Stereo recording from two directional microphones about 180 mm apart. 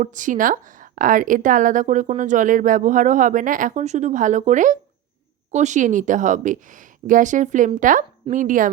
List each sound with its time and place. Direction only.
0.0 s a woman's voice: 45° right (ahead or behind)